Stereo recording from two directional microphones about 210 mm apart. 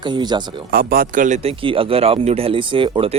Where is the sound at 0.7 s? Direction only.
45° right (ahead or behind).